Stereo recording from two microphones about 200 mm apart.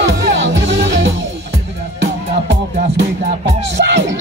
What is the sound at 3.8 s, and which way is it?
Music, 60° right (ahead or behind).